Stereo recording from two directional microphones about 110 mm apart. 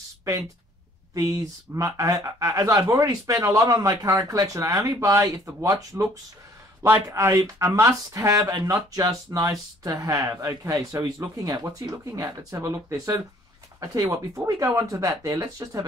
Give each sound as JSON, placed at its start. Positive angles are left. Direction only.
{"t": 0.2, "sound": "speech", "side_deg": -30}